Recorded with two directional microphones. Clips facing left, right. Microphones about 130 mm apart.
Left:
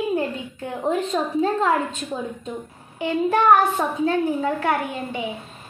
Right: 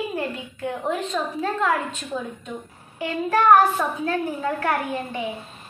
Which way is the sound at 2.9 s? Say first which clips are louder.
Left 2 dB; 20° left (ahead or behind).